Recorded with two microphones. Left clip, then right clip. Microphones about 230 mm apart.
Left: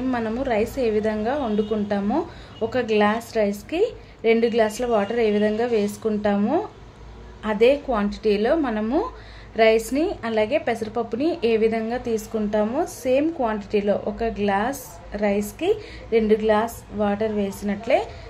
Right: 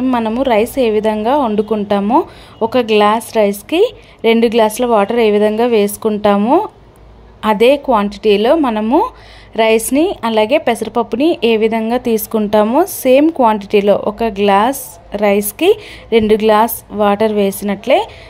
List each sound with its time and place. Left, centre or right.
0.1 s a woman's voice: right